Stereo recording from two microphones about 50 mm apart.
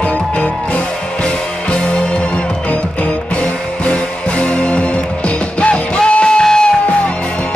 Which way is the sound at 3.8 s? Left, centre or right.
Left.